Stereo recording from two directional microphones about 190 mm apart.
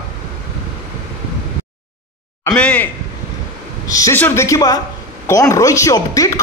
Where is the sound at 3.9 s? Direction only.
15° left (ahead or behind).